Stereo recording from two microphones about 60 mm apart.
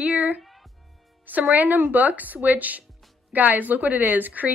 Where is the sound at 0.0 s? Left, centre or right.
Right.